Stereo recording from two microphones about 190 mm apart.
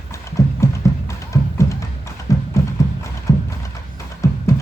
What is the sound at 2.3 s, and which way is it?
Music, 15° left (ahead or behind).